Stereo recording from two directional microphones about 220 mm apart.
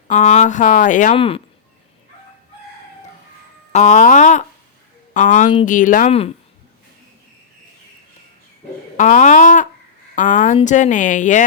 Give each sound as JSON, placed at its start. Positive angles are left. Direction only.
{"t": 0.1, "sound": "speech", "side_deg": 30}
{"t": 3.7, "sound": "speech", "side_deg": 30}
{"t": 9.0, "sound": "speech", "side_deg": 35}